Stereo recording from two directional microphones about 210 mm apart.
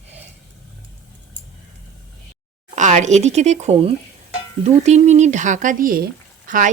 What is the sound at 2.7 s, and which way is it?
A woman's voice, 35° right (ahead or behind).